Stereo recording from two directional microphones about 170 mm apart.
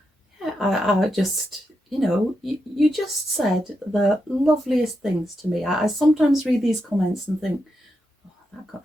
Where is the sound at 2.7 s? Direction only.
Centre (ahead or behind).